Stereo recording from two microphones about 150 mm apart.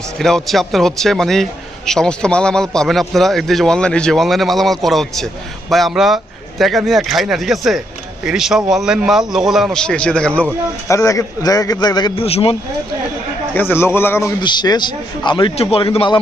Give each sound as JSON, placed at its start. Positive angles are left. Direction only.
{"t": 0.2, "sound": "a man's voice", "side_deg": 5}
{"t": 10.8, "sound": "a man's voice", "side_deg": 20}
{"t": 13.5, "sound": "a man's voice", "side_deg": 15}
{"t": 14.4, "sound": "a man's voice", "side_deg": 30}